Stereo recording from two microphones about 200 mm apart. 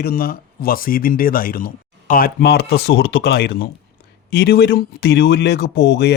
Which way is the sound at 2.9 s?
75° left (ahead or behind).